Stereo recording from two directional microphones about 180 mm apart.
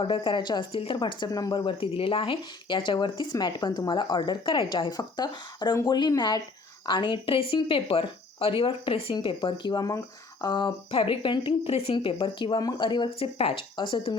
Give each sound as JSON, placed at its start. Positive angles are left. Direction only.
{"t": 0.0, "sound": "speech", "side_deg": 30}